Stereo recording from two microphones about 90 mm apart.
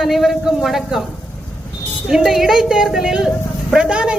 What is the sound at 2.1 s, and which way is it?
A woman's voice, 5° right (ahead or behind).